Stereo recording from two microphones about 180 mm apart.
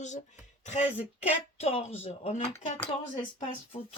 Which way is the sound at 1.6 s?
35° left (ahead or behind).